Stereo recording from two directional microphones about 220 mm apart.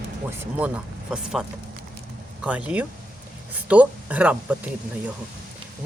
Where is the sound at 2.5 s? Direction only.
5° right (ahead or behind).